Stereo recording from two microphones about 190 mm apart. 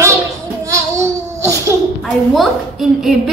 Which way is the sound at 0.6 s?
15° right (ahead or behind).